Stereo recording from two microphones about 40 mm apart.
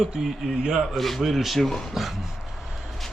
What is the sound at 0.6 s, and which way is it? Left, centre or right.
Speech, centre.